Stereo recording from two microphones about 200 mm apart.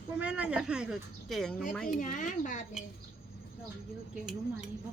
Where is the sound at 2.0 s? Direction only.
40° left (ahead or behind).